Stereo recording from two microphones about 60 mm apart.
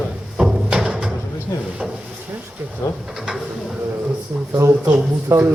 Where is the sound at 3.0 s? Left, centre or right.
Centre.